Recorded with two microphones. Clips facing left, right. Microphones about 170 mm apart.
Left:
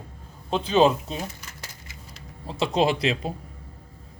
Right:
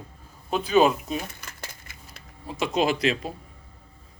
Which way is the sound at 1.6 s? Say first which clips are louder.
Right 1 dB; 55° right (ahead or behind).